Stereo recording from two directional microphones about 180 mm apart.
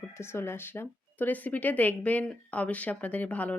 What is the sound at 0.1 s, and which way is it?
Speech, 15° left (ahead or behind).